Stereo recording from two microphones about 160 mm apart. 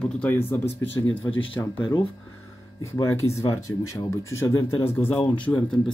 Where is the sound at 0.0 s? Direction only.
5° left (ahead or behind).